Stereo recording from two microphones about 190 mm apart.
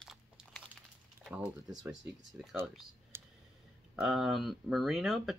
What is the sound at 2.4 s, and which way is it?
Speech, 5° right (ahead or behind).